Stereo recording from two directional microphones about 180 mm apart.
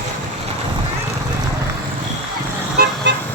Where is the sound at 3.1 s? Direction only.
75° right (ahead or behind).